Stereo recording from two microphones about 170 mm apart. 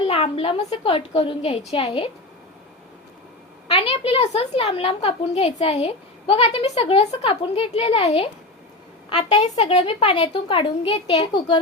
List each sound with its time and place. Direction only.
0.1 s a woman's voice: 35° left (ahead or behind)
3.7 s a woman's voice: 35° left (ahead or behind)